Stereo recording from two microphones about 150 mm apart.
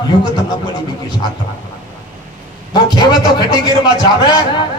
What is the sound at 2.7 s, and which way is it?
A man's voice, 25° left (ahead or behind).